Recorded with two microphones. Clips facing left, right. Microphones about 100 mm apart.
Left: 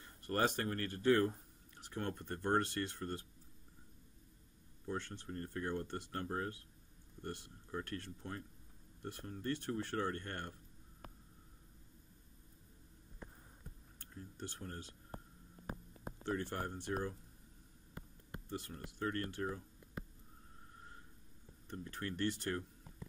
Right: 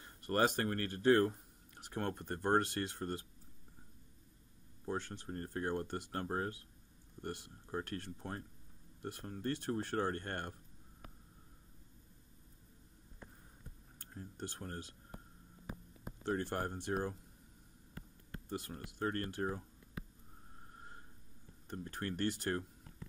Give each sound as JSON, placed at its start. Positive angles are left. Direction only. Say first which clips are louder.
{"t": 0.0, "sound": "speech", "louder": "right 3 dB", "side_deg": -60}
{"t": 4.8, "sound": "speech", "louder": "right 2 dB", "side_deg": -35}
{"t": 7.7, "sound": "speech", "louder": "right 2 dB", "side_deg": -40}
{"t": 14.1, "sound": "speech", "louder": "right 2 dB", "side_deg": -45}
{"t": 16.3, "sound": "speech", "louder": "right 3 dB", "side_deg": -45}
{"t": 18.7, "sound": "speech", "louder": "right 2 dB", "side_deg": -40}
{"t": 21.7, "sound": "speech", "louder": "right 2 dB", "side_deg": -50}